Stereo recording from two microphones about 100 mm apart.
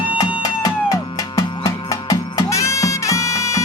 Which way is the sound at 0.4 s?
35° left (ahead or behind).